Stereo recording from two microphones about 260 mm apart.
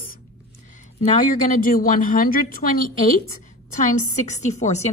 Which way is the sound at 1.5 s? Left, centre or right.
Left.